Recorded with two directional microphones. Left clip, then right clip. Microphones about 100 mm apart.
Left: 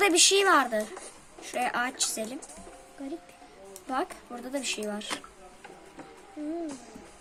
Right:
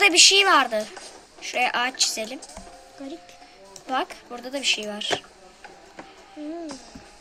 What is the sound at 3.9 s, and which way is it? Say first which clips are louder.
Speech: right 5 dB; 20° left (ahead or behind).